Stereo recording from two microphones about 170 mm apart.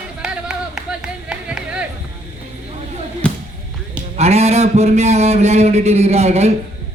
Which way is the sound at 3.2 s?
5° left (ahead or behind).